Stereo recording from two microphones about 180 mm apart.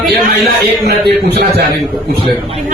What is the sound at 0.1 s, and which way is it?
Speech, 60° right (ahead or behind).